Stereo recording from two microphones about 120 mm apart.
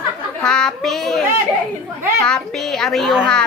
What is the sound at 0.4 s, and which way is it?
Speech, 5° left (ahead or behind).